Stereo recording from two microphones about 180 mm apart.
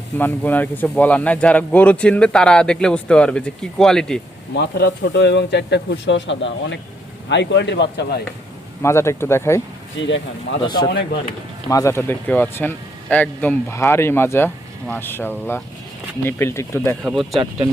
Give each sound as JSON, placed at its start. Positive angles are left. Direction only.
{"t": 0.2, "sound": "speech", "side_deg": 10}
{"t": 4.5, "sound": "speech", "side_deg": 70}
{"t": 7.3, "sound": "speech", "side_deg": 75}
{"t": 8.8, "sound": "a man's voice", "side_deg": 15}
{"t": 10.0, "sound": "speech", "side_deg": 90}
{"t": 11.7, "sound": "a man's voice", "side_deg": 15}
{"t": 17.0, "sound": "speech", "side_deg": 0}